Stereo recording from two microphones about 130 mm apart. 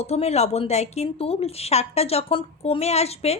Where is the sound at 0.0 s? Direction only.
55° left (ahead or behind).